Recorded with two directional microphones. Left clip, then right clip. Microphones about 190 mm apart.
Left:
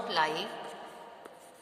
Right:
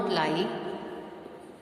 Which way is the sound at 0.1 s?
30° left (ahead or behind).